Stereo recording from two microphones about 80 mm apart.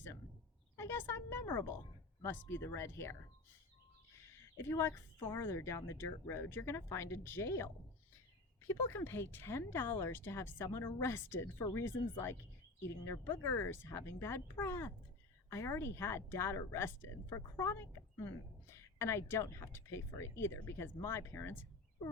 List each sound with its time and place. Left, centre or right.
0.8 s a woman's voice: left
4.7 s a woman's voice: left